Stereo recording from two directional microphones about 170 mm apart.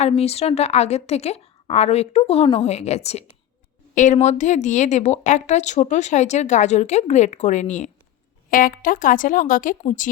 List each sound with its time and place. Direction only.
0.0 s a woman's voice: 35° left (ahead or behind); by 9.7 s 50° left (ahead or behind)